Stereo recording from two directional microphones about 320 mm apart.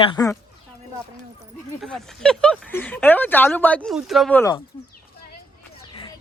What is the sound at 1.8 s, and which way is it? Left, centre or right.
Speech, centre.